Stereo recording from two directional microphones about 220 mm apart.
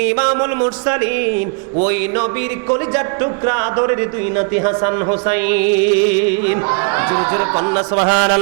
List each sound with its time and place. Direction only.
0.1 s music: 20° right (ahead or behind)
3.4 s speech: 20° right (ahead or behind)
8.0 s music: 15° right (ahead or behind)